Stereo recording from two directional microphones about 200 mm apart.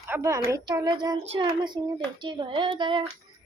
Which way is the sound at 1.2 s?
30° right (ahead or behind).